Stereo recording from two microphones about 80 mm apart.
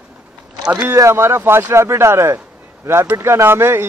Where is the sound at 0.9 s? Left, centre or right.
Right.